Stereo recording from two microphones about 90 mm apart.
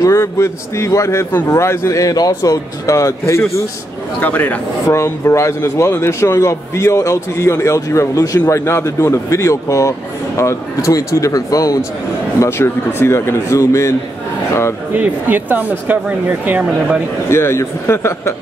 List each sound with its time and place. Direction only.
0.0 s a man's voice: 30° left (ahead or behind)
4.2 s speech: 20° left (ahead or behind)
4.8 s a man's voice: 35° left (ahead or behind)
12.4 s speech: 30° left (ahead or behind)
15.0 s speech: 20° right (ahead or behind)
17.3 s speech: 30° left (ahead or behind)